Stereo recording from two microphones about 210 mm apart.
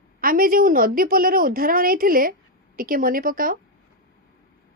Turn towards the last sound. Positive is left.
turn(degrees=-40)  # may be behind; listen again after turning